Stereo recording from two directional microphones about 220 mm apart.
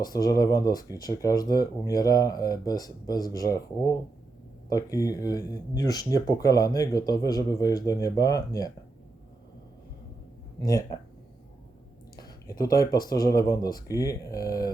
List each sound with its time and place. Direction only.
0.0 s speech: 15° left (ahead or behind)
10.6 s speech: 15° left (ahead or behind)
12.1 s a sound: 15° left (ahead or behind)
12.8 s speech: 15° left (ahead or behind)